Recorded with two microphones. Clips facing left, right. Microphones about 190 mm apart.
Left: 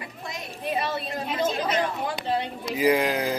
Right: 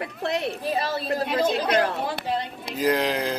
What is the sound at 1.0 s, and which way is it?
Speech, centre (ahead or behind).